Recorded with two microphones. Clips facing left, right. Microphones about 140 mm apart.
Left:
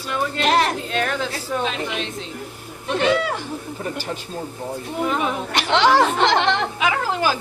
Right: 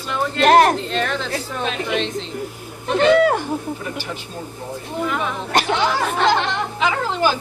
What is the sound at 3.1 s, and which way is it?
Speech, 50° right (ahead or behind).